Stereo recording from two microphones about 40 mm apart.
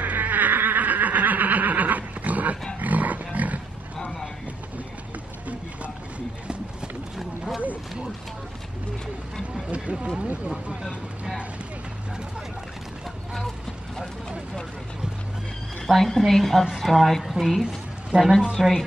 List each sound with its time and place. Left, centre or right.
0.0 s a sound: right
7.2 s wild animals: centre
9.9 s a sound: right
10.2 s vehicle: right
16.0 s a woman's voice: centre
18.1 s speech: right
18.6 s speech: centre